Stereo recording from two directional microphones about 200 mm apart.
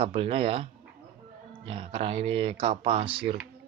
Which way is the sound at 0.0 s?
30° right (ahead or behind).